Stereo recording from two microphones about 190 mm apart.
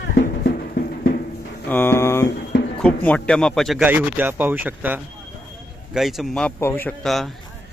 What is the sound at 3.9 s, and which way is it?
Speech, 10° right (ahead or behind).